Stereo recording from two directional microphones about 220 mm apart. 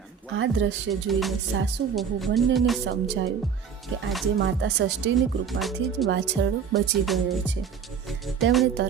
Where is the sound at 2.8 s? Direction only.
55° right (ahead or behind).